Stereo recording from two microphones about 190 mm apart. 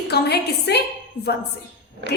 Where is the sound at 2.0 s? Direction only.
65° right (ahead or behind).